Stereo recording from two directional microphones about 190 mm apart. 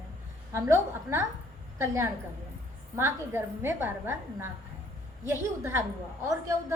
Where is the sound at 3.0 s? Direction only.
10° right (ahead or behind).